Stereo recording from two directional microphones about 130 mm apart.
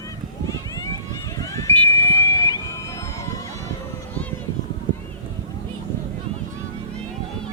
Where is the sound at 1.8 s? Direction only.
20° left (ahead or behind).